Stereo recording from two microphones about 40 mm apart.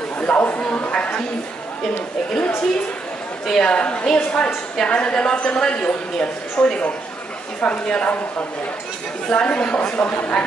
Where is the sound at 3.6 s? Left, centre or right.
Left.